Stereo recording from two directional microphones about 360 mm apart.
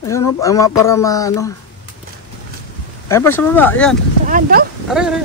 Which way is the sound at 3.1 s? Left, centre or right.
Centre.